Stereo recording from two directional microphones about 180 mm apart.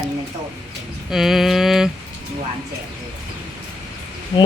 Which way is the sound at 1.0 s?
Centre (ahead or behind).